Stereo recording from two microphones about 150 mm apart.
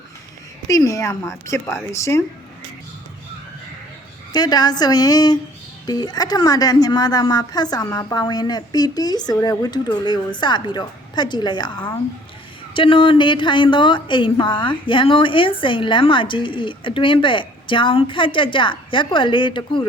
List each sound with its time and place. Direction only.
0.7 s a woman's voice: 25° left (ahead or behind)
4.3 s a woman's voice: 25° left (ahead or behind)